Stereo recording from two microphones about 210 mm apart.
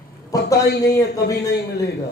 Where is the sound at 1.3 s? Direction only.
55° left (ahead or behind).